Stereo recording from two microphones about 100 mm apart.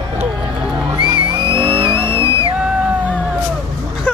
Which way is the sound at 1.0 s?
55° right (ahead or behind).